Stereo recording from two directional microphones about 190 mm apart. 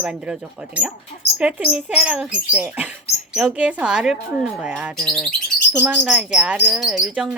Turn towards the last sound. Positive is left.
turn(degrees=-5)  # may be behind; listen again after turning